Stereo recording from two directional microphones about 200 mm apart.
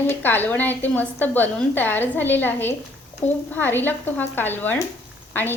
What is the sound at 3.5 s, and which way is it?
A woman's voice, 10° left (ahead or behind).